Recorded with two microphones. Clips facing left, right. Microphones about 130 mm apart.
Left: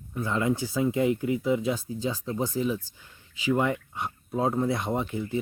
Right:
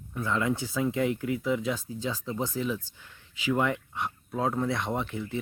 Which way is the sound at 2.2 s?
5° left (ahead or behind).